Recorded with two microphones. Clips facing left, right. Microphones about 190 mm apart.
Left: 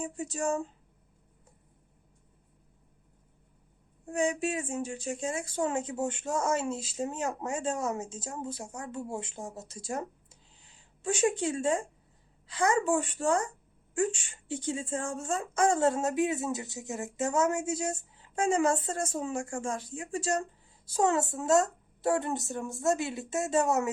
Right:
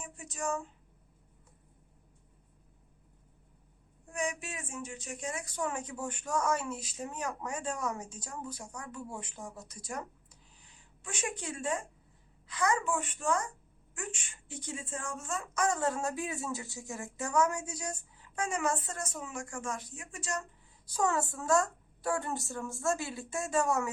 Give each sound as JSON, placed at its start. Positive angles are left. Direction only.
{"t": 0.0, "sound": "speech", "side_deg": 30}
{"t": 4.1, "sound": "speech", "side_deg": 30}